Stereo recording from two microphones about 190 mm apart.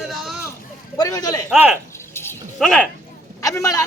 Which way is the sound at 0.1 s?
Centre (ahead or behind).